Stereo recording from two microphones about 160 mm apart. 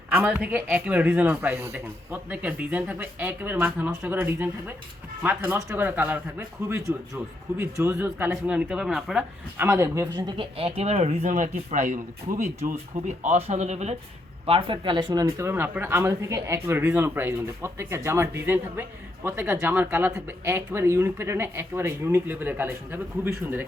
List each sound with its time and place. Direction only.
0.1 s speech: 10° right (ahead or behind)
9.6 s speech: 20° right (ahead or behind); by 13.9 s 45° right (ahead or behind)
14.4 s speech: 35° right (ahead or behind); by 23.3 s 15° right (ahead or behind)